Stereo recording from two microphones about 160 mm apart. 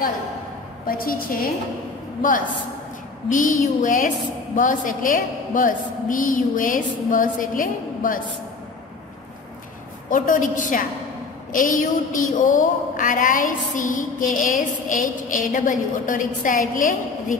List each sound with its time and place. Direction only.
0.8 s a woman's voice: 65° left (ahead or behind)
3.3 s a woman's voice: 55° left (ahead or behind)
10.0 s a woman's voice: 55° left (ahead or behind)